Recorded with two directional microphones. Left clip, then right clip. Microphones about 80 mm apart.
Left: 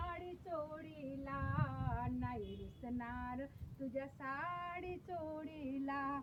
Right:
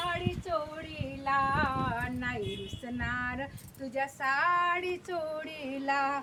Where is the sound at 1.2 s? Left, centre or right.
Right.